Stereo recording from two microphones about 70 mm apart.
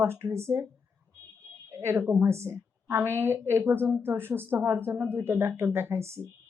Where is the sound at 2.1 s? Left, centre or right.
Right.